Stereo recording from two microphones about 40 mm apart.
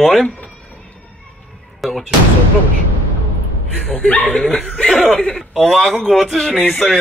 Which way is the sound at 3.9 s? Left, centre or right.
Left.